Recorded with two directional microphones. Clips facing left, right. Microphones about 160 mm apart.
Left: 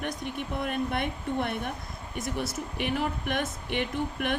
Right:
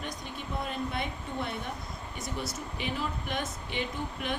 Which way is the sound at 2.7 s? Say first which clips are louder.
Left 5 dB; 60° left (ahead or behind).